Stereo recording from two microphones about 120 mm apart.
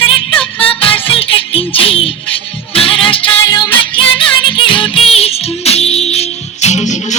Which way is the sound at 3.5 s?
35° left (ahead or behind).